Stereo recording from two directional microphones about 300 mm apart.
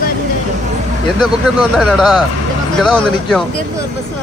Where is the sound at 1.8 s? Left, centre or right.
Centre.